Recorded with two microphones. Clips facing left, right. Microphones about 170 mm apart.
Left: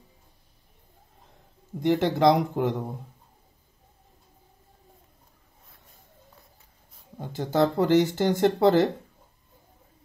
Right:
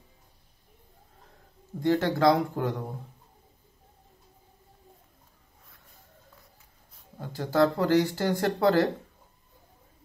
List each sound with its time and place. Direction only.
1.8 s speech: 20° left (ahead or behind)
7.2 s speech: 20° left (ahead or behind)